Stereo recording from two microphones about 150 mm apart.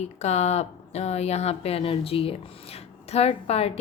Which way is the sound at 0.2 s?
50° left (ahead or behind).